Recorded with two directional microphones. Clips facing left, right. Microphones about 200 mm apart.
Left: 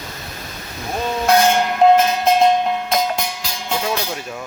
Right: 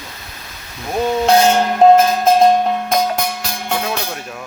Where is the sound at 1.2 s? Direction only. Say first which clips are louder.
Right 1 dB; 30° right (ahead or behind); by 4.1 s 60° right (ahead or behind).